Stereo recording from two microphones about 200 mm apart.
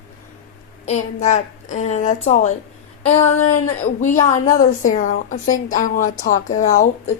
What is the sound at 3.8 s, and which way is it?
A woman's voice, 35° left (ahead or behind).